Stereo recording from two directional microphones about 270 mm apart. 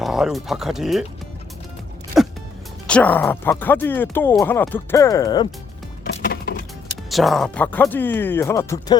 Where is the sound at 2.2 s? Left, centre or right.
Centre.